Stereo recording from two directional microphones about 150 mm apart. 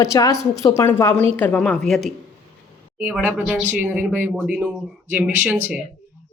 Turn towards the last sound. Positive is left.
turn(degrees=-10)  # may be behind; listen again after turning